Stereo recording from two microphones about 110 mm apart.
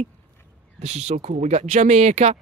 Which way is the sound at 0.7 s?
90° right.